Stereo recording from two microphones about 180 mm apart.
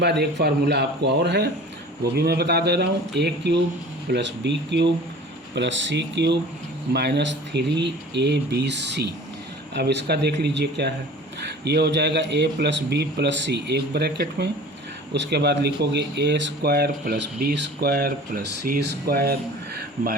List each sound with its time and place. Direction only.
0.0 s speech: 70° right (ahead or behind)